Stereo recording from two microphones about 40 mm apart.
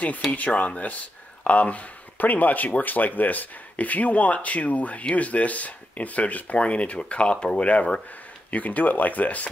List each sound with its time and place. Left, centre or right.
0.3 s speech: left